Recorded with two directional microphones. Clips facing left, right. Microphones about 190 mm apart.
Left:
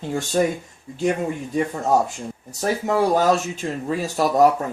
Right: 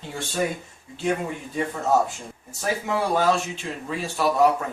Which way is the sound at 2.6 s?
40° left (ahead or behind).